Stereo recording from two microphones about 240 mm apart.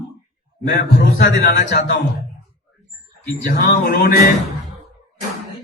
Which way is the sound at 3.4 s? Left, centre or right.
Left.